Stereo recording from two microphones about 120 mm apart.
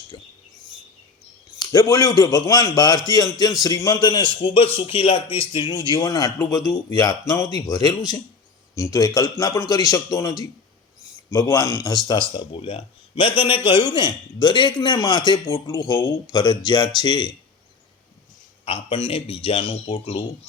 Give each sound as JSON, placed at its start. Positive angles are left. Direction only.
{"t": 1.5, "sound": "a man's voice", "side_deg": 30}
{"t": 5.9, "sound": "a man's voice", "side_deg": 35}
{"t": 12.4, "sound": "a man's voice", "side_deg": 45}
{"t": 18.6, "sound": "a man's voice", "side_deg": 45}